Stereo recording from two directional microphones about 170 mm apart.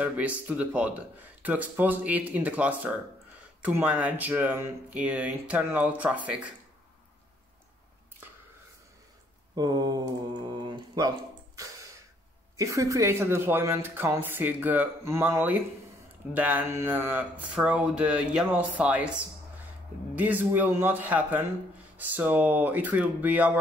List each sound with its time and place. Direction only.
0.0 s speech: 10° right (ahead or behind)
9.6 s a sound: 20° right (ahead or behind)
12.5 s speech: 20° right (ahead or behind)
20.2 s speech: 10° right (ahead or behind)